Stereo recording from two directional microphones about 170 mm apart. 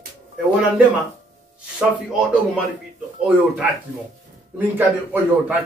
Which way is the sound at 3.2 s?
10° right (ahead or behind).